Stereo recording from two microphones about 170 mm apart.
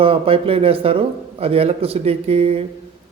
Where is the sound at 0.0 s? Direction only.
35° right (ahead or behind).